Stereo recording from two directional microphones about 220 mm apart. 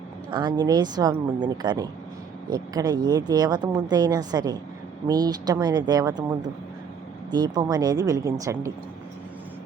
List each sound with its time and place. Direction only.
0.3 s speech: 20° right (ahead or behind)